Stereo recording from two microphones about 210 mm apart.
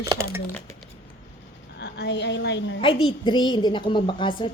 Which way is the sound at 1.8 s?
55° left (ahead or behind).